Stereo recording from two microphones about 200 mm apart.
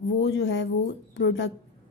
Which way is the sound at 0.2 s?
60° left (ahead or behind).